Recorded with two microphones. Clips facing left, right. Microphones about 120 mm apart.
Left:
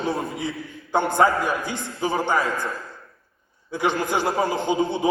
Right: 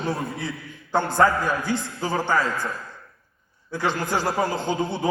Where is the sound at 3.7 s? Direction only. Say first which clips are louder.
Left 2 dB; 15° left (ahead or behind).